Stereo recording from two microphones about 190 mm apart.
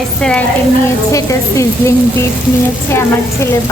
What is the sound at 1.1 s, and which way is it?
Speech, 15° left (ahead or behind).